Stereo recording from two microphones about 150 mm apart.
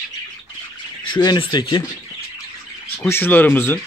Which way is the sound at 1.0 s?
30° left (ahead or behind).